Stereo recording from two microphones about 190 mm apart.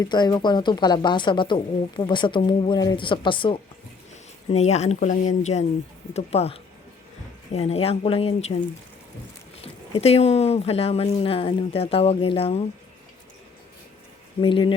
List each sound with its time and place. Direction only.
0.0 s speech: 20° left (ahead or behind)
9.6 s speech: 35° left (ahead or behind)
14.4 s speech: 25° left (ahead or behind)